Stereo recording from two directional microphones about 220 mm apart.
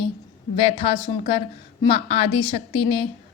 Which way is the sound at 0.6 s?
25° left (ahead or behind).